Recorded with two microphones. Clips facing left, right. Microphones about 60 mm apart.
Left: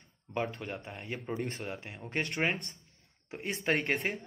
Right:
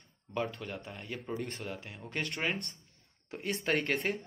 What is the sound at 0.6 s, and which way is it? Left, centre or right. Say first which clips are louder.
A man's voice: left 1 dB; left.